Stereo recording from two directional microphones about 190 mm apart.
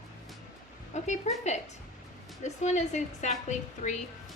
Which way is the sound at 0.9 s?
40° left (ahead or behind).